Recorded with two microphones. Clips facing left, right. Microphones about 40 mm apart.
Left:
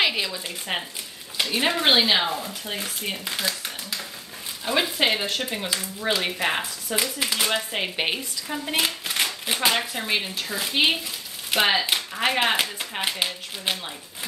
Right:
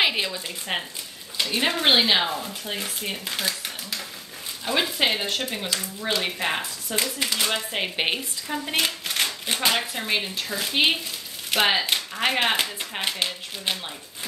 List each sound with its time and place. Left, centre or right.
0.0 s speech: centre
7.8 s speech: centre
8.7 s a sound: centre
9.7 s speech: centre